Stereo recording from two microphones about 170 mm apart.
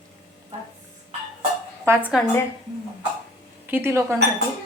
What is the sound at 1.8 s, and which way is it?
Speech, 10° right (ahead or behind).